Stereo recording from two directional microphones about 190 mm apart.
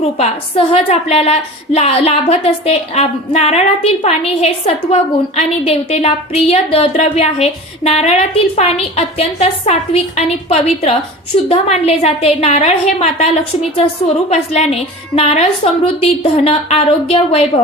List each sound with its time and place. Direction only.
0.2 s a woman's voice: 30° left (ahead or behind)